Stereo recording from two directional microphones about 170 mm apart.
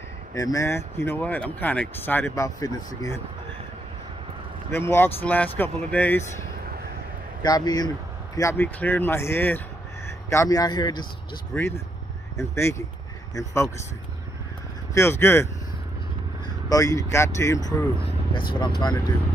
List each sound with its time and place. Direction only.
0.3 s speech: 20° left (ahead or behind)
4.6 s speech: 15° left (ahead or behind)
7.4 s speech: 25° left (ahead or behind)
11.5 s speech: 15° left (ahead or behind)
15.0 s speech: 15° left (ahead or behind)
16.6 s speech: 20° left (ahead or behind)